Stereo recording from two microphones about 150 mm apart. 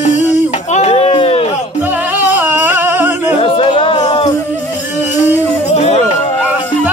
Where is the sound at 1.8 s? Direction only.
10° right (ahead or behind).